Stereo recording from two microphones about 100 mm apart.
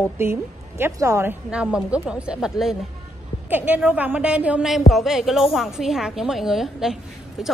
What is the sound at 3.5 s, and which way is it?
A woman's voice, 15° right (ahead or behind).